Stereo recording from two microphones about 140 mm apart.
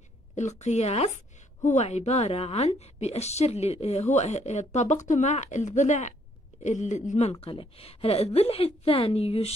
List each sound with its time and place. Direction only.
0.4 s speech: 55° left (ahead or behind)